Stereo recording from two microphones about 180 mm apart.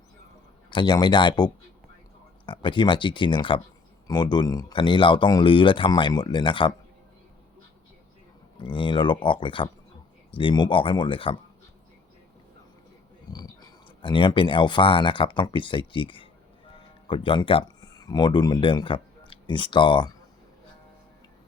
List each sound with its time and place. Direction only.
0.7 s speech: 25° left (ahead or behind)
2.5 s speech: 25° left (ahead or behind)
8.5 s speech: 25° left (ahead or behind)
13.3 s speech: 25° left (ahead or behind)